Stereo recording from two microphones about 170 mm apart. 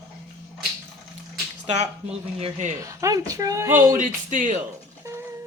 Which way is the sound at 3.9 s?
50° right (ahead or behind).